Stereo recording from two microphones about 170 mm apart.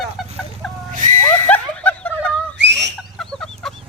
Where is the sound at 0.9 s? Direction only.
50° right (ahead or behind).